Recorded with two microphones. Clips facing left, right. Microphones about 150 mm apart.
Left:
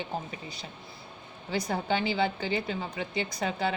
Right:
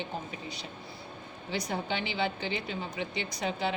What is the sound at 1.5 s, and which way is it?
A woman's voice, 45° left (ahead or behind).